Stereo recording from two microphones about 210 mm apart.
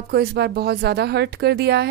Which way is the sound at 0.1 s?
50° right (ahead or behind).